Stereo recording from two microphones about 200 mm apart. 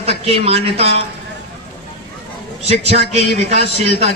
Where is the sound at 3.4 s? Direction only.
30° right (ahead or behind).